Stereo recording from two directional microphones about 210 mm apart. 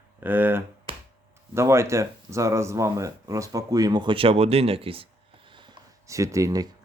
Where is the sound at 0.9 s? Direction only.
25° right (ahead or behind).